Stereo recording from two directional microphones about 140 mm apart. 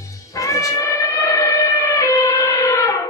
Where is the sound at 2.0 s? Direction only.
25° left (ahead or behind).